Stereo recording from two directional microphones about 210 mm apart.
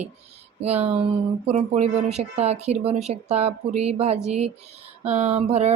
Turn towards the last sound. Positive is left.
turn(degrees=-30)  # may be behind; listen again after turning